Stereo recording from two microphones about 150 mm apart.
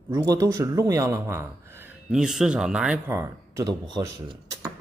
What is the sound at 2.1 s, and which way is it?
Speech, 5° right (ahead or behind).